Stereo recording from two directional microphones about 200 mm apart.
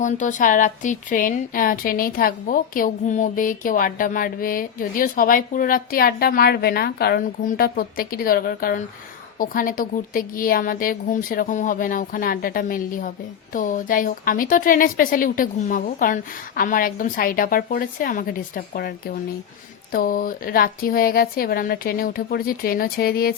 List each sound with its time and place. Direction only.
0.0 s a woman's voice: 40° left (ahead or behind)